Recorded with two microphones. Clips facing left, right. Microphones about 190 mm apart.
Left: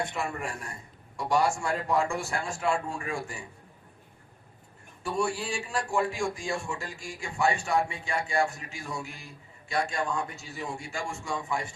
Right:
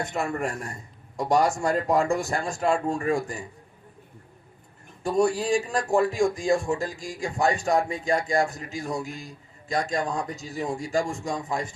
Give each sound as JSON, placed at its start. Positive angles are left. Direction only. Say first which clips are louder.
{"t": 0.0, "sound": "a man's voice", "louder": "right 5 dB", "side_deg": -40}
{"t": 5.0, "sound": "a man's voice", "louder": "right 7 dB", "side_deg": -40}